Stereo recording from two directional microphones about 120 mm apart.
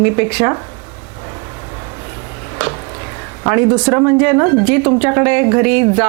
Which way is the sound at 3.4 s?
25° right (ahead or behind).